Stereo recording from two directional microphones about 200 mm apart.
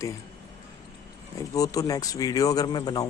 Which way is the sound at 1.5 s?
15° left (ahead or behind).